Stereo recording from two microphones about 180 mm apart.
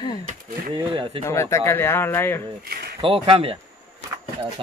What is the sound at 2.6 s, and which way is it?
Speech, 60° right (ahead or behind).